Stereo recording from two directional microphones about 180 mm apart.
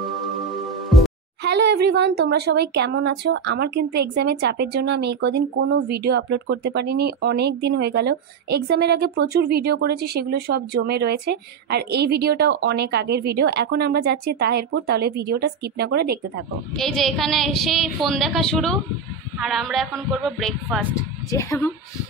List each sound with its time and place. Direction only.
0.8 s music: centre (ahead or behind)
1.4 s speech: 70° right (ahead or behind)
16.7 s a woman's voice: centre (ahead or behind)
20.9 s a woman's voice: 15° left (ahead or behind)